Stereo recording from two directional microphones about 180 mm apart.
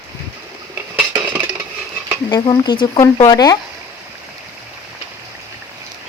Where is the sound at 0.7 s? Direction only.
10° right (ahead or behind).